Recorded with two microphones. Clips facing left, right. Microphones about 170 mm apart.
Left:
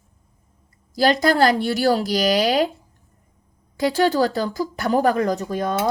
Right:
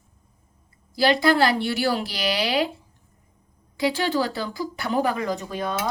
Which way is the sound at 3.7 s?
40° left (ahead or behind).